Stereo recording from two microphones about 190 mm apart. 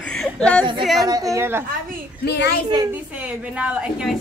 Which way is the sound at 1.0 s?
20° right (ahead or behind).